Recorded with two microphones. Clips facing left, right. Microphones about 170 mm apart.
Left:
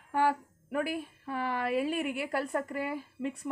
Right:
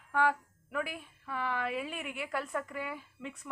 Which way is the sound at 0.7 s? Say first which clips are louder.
Left 5 dB; 40° left (ahead or behind).